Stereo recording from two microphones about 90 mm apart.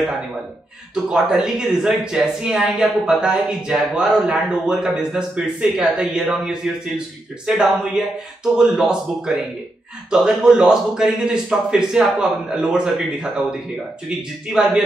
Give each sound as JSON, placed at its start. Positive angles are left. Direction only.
{"t": 0.9, "sound": "speech", "side_deg": -5}